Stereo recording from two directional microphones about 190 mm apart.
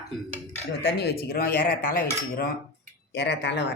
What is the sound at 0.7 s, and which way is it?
Cutlery, 60° left (ahead or behind).